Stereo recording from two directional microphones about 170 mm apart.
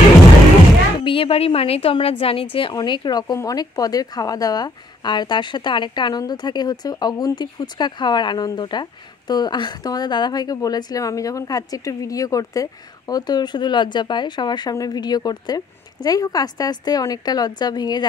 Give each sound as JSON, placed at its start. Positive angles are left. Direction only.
{"t": 1.0, "sound": "speech", "side_deg": 30}